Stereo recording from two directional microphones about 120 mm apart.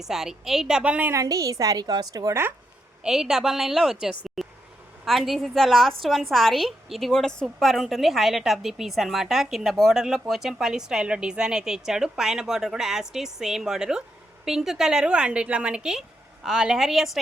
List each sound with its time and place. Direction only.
0.0 s a woman's voice: 5° right (ahead or behind)
1.1 s a woman's voice: 30° right (ahead or behind)
3.0 s a woman's voice: 5° right (ahead or behind)
4.4 s vehicle: centre (ahead or behind)
5.0 s a woman's voice: centre (ahead or behind)